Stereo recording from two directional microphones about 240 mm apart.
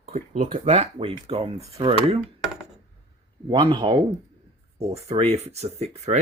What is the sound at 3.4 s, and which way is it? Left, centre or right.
Speech, centre.